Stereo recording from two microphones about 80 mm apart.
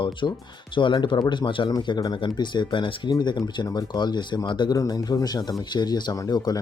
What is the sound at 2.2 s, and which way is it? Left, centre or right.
Speech, left.